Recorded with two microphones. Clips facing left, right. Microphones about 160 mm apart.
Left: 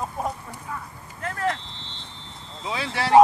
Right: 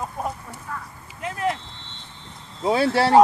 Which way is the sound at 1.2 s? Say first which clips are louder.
Right 1 dB; 15° right (ahead or behind).